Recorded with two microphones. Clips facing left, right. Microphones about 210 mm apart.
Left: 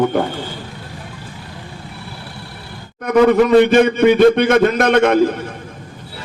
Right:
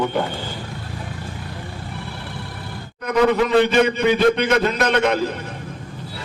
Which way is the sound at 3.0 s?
50° left (ahead or behind).